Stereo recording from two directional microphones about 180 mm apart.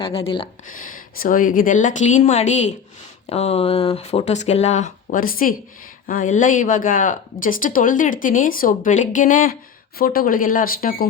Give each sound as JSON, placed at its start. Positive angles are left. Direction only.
{"t": 0.0, "sound": "speech", "side_deg": 30}
{"t": 0.7, "sound": "speech", "side_deg": 50}